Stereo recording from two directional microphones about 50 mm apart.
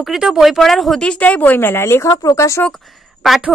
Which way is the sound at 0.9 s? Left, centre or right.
Left.